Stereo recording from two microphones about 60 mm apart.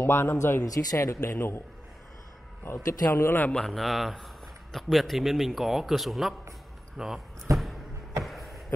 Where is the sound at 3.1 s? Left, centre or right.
Left.